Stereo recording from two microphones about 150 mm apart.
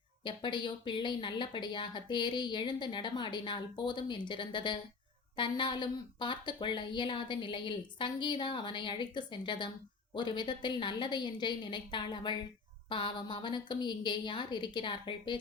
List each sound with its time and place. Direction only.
0.3 s speech: 30° left (ahead or behind)